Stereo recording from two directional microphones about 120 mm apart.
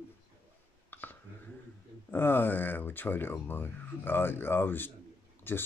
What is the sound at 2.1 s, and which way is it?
Speech, 15° left (ahead or behind).